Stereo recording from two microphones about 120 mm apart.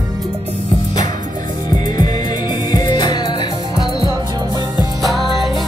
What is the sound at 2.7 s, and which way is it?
Music, 35° left (ahead or behind).